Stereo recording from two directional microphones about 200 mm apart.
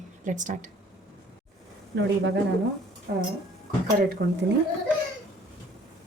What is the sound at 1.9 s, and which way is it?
Speech, 55° right (ahead or behind).